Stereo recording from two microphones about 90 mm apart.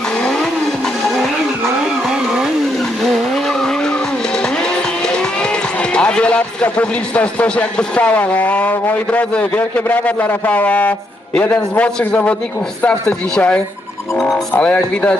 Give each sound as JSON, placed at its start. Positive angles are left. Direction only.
{"t": 0.2, "sound": "vehicle", "side_deg": 5}
{"t": 2.0, "sound": "vehicle", "side_deg": -5}
{"t": 4.4, "sound": "a man's voice", "side_deg": 10}
{"t": 14.5, "sound": "a man's voice", "side_deg": 20}